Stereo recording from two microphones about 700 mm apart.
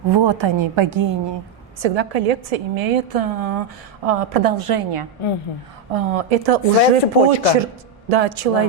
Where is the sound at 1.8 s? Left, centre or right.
Right.